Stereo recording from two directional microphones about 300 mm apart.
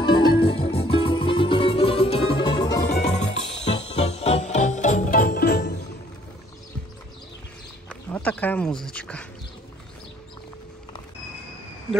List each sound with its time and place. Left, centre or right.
0.0 s music: centre
2.9 s music: left
4.0 s music: left
7.9 s a sound: centre